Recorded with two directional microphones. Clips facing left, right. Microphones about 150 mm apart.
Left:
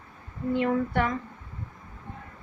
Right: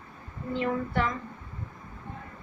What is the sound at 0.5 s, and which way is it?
Speech, 65° left (ahead or behind).